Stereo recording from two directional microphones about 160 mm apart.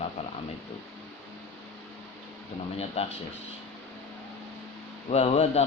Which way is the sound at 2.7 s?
40° left (ahead or behind).